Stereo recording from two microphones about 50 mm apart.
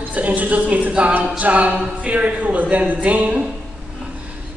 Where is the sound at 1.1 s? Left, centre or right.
Right.